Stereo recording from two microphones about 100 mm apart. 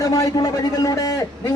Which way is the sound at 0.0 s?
35° left (ahead or behind).